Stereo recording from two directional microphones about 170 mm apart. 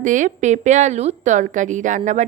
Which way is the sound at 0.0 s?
50° right (ahead or behind).